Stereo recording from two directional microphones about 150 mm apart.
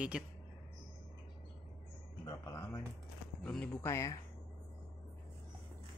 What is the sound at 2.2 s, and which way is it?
Speech, 20° left (ahead or behind).